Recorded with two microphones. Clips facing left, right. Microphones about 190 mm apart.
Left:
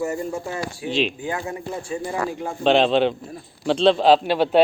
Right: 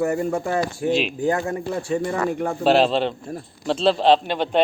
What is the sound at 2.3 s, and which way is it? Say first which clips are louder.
Speech: right 5 dB; 60° right (ahead or behind).